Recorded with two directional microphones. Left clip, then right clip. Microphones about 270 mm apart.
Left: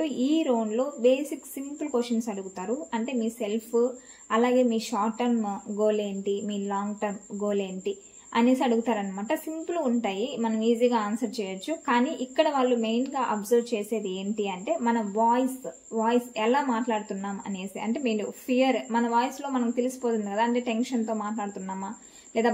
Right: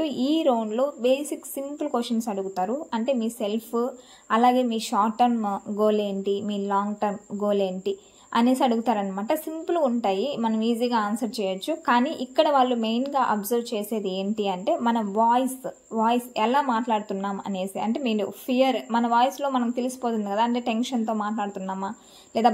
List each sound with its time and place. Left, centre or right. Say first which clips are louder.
0.0 s speech: right 3 dB; right